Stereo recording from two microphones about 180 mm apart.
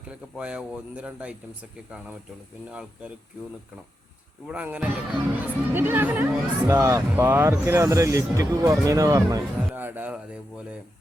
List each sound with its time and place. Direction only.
0.1 s speech: 5° right (ahead or behind)
4.4 s speech: 10° right (ahead or behind)